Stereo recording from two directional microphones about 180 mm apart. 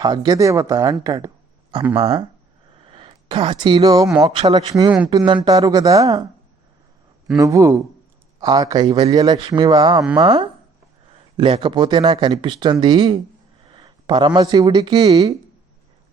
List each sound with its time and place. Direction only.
0.0 s speech: 25° right (ahead or behind)
2.0 s speech: 30° right (ahead or behind)
7.3 s a man's voice: 20° right (ahead or behind)